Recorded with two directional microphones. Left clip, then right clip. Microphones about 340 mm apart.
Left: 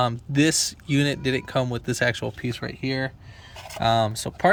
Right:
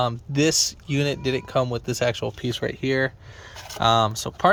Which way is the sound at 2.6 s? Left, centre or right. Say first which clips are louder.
Right 6 dB; right.